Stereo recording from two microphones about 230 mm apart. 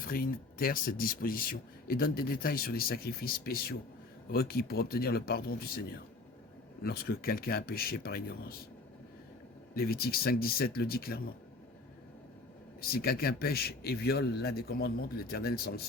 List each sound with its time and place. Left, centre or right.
0.0 s speech: left
6.8 s speech: left
9.7 s speech: left
12.8 s speech: left